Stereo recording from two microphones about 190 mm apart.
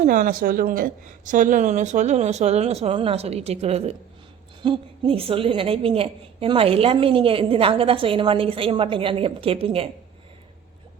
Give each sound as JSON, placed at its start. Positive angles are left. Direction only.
{"t": 0.0, "sound": "a woman's voice", "side_deg": -45}